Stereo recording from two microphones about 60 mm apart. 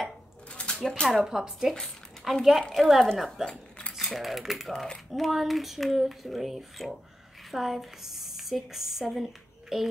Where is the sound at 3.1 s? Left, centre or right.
Centre.